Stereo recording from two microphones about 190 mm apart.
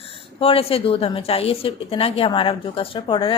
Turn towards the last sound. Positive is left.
turn(degrees=25)  # may be behind; listen again after turning